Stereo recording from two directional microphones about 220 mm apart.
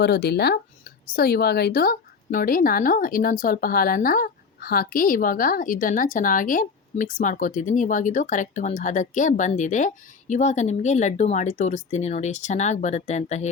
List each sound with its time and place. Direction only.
0.0 s speech: 50° left (ahead or behind); by 13.5 s 30° left (ahead or behind)